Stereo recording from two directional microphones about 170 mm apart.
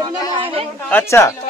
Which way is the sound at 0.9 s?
10° left (ahead or behind).